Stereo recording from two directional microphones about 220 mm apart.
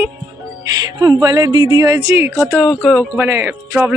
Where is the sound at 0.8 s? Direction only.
20° right (ahead or behind).